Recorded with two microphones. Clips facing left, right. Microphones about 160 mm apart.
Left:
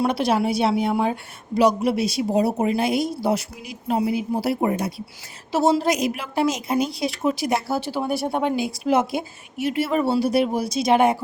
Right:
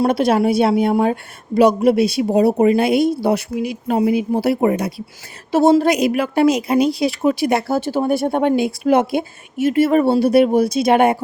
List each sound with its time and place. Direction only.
0.0 s a woman's voice: 50° right (ahead or behind); by 5.0 s 85° right
5.5 s a woman's voice: 50° right (ahead or behind)